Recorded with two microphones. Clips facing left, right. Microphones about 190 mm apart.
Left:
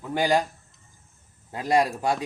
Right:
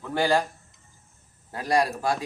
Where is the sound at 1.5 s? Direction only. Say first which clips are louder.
Left 1 dB; 20° left (ahead or behind).